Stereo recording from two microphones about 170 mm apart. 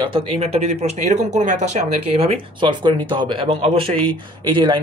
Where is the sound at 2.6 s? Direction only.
30° right (ahead or behind).